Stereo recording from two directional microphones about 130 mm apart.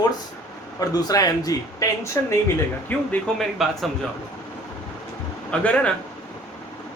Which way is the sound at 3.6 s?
Centre (ahead or behind).